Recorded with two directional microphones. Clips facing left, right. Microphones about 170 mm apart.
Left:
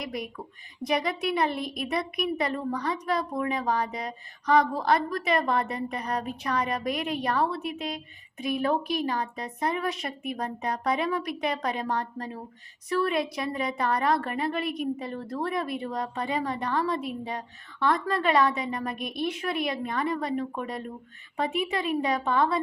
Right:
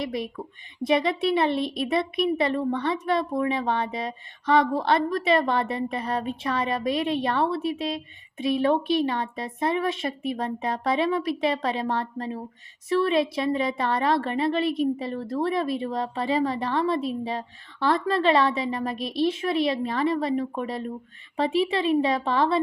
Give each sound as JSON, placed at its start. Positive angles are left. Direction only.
{"t": 0.0, "sound": "a woman's voice", "side_deg": -25}